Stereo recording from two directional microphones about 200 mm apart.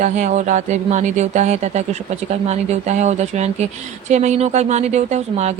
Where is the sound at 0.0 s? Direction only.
35° right (ahead or behind).